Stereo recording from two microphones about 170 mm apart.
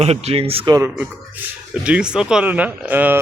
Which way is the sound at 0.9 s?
5° right (ahead or behind).